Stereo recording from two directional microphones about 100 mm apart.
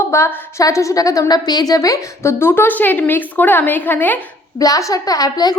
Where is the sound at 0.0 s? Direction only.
30° left (ahead or behind).